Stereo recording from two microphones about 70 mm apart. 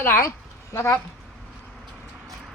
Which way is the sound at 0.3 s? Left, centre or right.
Left.